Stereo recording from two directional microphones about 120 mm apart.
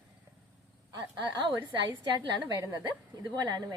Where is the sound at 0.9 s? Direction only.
35° right (ahead or behind).